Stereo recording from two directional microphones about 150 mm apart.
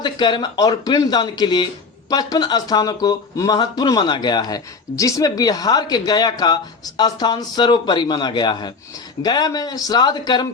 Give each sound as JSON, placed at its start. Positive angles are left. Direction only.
{"t": 0.0, "sound": "speech", "side_deg": 30}